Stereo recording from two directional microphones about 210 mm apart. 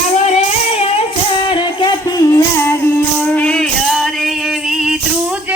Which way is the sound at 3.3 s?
5° left (ahead or behind).